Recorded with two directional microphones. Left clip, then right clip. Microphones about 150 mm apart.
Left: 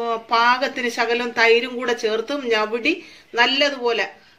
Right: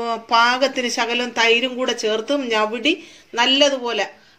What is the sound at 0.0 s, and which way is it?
Speech, 35° right (ahead or behind).